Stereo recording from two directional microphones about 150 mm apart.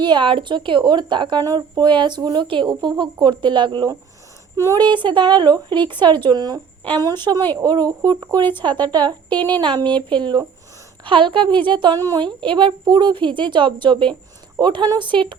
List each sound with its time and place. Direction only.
0.0 s a woman's voice: 30° right (ahead or behind)
4.5 s a woman's voice: 20° right (ahead or behind)